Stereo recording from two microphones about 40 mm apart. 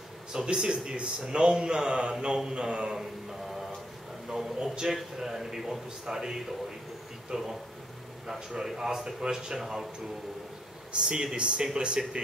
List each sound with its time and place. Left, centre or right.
0.3 s a man's voice: centre
4.6 s a man's voice: centre
4.9 s a man's voice: centre
10.9 s a man's voice: right